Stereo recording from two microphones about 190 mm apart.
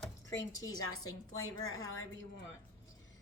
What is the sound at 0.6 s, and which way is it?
Speech, 20° left (ahead or behind).